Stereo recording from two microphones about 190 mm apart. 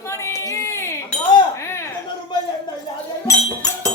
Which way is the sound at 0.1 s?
15° left (ahead or behind).